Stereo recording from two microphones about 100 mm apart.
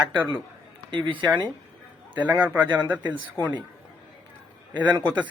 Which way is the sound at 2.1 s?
15° right (ahead or behind).